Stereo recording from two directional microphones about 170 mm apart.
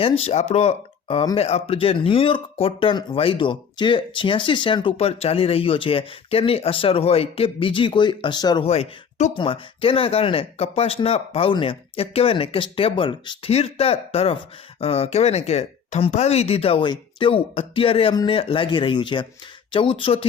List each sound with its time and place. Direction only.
0.0 s speech: 35° left (ahead or behind)
8.6 s speech: 40° left (ahead or behind)